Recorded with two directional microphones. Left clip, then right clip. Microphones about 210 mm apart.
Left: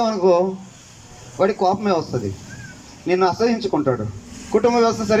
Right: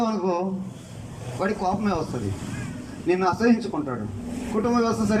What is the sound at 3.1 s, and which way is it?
A man's voice, 15° left (ahead or behind).